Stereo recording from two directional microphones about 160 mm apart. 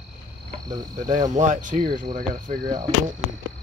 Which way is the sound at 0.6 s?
25° right (ahead or behind).